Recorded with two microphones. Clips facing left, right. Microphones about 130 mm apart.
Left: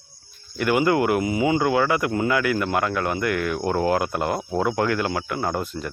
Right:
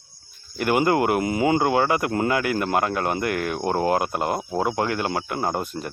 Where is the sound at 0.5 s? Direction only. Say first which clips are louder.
Even; 35° right (ahead or behind).